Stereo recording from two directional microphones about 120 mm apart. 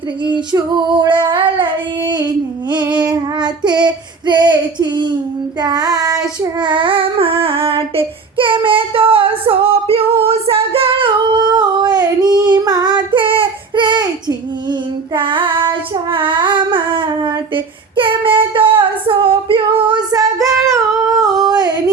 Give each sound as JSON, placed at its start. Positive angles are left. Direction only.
{"t": 0.5, "sound": "child singing", "side_deg": -40}
{"t": 2.8, "sound": "child singing", "side_deg": -10}
{"t": 3.1, "sound": "child singing", "side_deg": -40}
{"t": 6.6, "sound": "child singing", "side_deg": -40}
{"t": 21.2, "sound": "a sound", "side_deg": -30}